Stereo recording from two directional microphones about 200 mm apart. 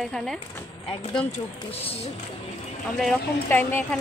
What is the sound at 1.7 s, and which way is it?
Speech, 30° left (ahead or behind).